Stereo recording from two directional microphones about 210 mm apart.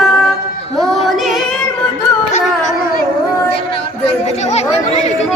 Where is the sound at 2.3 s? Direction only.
35° left (ahead or behind).